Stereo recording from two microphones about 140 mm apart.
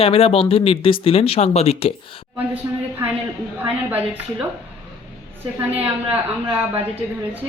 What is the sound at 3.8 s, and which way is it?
Speech, 10° right (ahead or behind).